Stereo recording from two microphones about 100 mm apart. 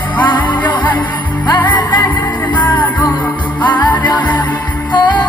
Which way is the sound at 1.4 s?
50° left (ahead or behind).